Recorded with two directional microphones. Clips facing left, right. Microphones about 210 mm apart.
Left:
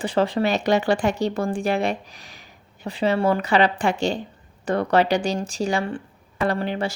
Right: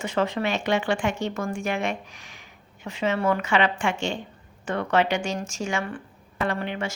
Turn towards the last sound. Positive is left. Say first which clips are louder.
# left 4 dB
turn(degrees=35)  # may be behind; listen again after turning